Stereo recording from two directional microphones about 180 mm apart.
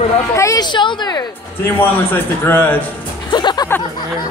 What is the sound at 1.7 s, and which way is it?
A man's voice, 10° left (ahead or behind).